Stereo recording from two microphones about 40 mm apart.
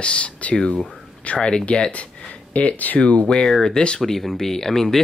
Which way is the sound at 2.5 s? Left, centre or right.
Left.